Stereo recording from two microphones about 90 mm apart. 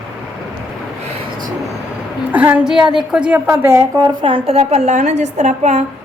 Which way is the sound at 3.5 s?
30° right (ahead or behind).